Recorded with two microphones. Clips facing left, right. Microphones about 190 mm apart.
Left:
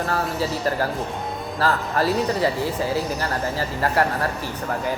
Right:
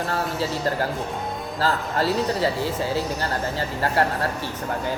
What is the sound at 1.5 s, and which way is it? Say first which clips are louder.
Speech: left 2 dB; 25° right (ahead or behind).